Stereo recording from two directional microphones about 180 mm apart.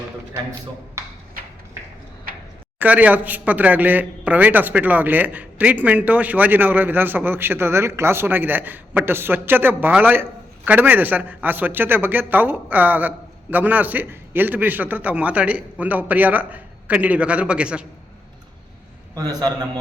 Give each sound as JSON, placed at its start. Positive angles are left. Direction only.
{"t": 2.3, "sound": "a sound", "side_deg": -55}
{"t": 2.7, "sound": "a man's voice", "side_deg": -10}
{"t": 19.1, "sound": "a man's voice", "side_deg": -20}